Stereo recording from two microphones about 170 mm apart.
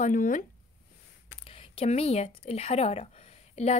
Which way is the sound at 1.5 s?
35° left (ahead or behind).